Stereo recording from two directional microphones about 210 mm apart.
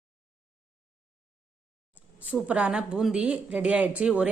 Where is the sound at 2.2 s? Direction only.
5° right (ahead or behind).